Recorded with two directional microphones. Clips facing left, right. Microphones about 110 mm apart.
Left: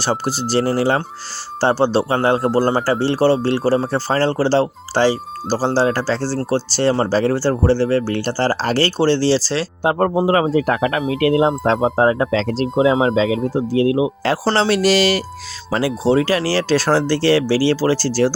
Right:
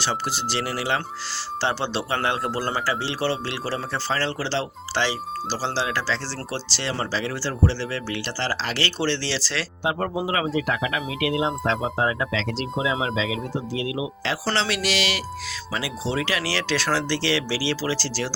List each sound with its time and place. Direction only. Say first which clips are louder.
0.0 s speech: left 6 dB; 40° left (ahead or behind)
9.9 s speech: left 10 dB; 45° left (ahead or behind)